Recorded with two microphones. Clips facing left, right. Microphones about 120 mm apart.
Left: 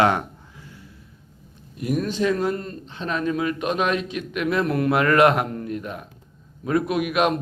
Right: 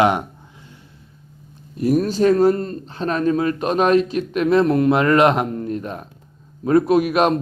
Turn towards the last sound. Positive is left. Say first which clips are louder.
# right 5 dB
turn(degrees=-35)  # may be behind; listen again after turning